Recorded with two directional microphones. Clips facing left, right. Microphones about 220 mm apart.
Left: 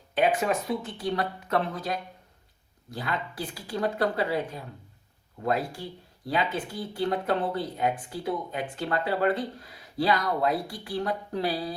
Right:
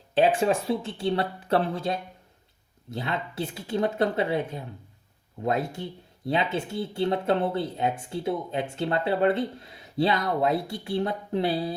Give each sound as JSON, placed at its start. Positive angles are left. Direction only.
{"t": 0.1, "sound": "speech", "side_deg": -30}